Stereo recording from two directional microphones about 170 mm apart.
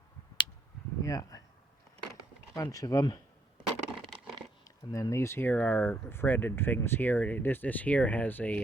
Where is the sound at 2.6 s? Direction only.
20° left (ahead or behind).